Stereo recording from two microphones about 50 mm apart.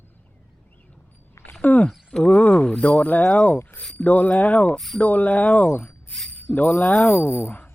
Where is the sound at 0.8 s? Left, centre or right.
Left.